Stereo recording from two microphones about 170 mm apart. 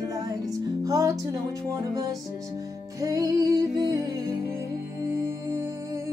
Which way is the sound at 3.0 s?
20° right (ahead or behind).